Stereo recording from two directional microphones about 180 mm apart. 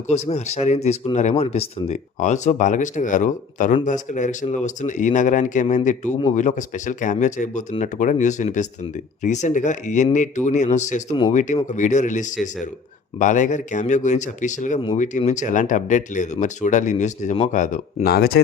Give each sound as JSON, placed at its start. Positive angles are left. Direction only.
{"t": 0.1, "sound": "speech", "side_deg": 35}
{"t": 18.1, "sound": "speech", "side_deg": 60}